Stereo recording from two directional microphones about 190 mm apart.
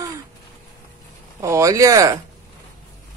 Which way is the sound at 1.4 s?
15° right (ahead or behind).